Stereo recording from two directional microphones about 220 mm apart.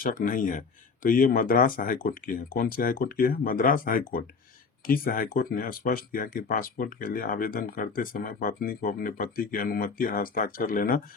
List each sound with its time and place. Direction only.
0.0 s speech: 40° left (ahead or behind)